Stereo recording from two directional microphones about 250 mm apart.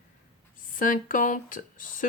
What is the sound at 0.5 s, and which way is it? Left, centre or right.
Speech, left.